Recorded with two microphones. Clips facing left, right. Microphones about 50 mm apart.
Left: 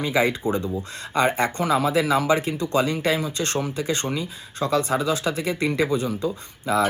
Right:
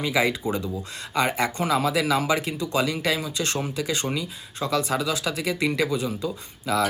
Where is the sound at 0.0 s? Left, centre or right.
Left.